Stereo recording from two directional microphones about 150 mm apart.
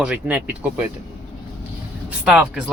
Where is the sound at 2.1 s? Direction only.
5° right (ahead or behind).